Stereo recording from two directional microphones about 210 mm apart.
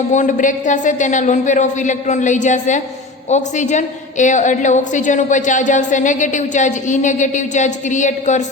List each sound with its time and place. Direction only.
0.1 s a woman's voice: 35° left (ahead or behind)